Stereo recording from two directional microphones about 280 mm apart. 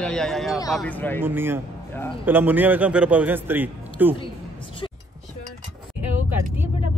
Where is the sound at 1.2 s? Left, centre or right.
Centre.